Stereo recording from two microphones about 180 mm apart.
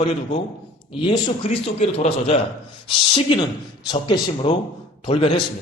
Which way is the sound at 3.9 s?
25° left (ahead or behind).